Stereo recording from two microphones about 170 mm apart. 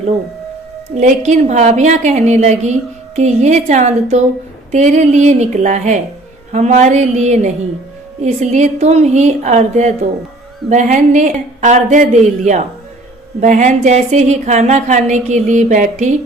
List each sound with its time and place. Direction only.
0.9 s a woman's voice: 45° right (ahead or behind)